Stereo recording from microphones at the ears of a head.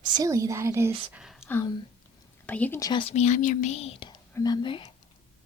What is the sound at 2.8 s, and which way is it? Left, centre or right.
A woman's voice, left.